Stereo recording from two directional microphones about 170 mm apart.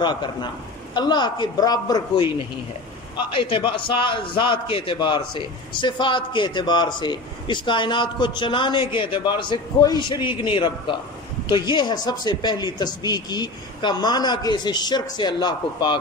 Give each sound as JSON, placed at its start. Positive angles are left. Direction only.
{"t": 0.0, "sound": "a man's voice", "side_deg": 25}
{"t": 3.3, "sound": "a man's voice", "side_deg": 30}